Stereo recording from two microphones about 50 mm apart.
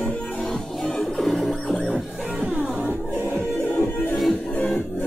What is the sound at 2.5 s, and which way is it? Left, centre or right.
Music, right.